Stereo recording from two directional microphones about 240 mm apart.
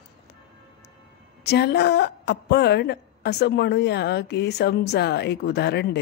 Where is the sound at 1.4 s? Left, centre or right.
Left.